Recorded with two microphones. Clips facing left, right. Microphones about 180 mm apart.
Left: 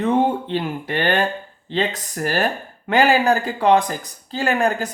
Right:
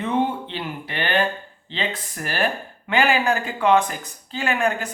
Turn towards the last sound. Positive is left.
turn(degrees=40)  # may be behind; listen again after turning